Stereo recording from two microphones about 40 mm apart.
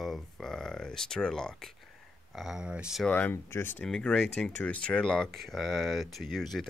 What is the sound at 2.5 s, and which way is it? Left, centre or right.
Speech, right.